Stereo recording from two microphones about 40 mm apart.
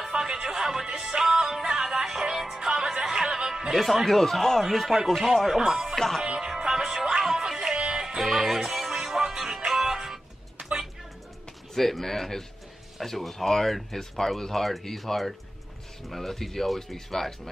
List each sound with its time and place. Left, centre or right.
0.2 s music: centre
3.7 s speech: centre
5.9 s speech: centre
6.2 s music: centre
7.7 s music: right
8.2 s speech: centre
8.5 s music: centre
10.6 s a sound: right
11.7 s speech: centre